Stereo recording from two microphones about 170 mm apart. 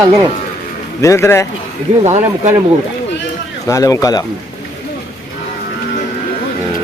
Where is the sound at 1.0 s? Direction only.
15° left (ahead or behind).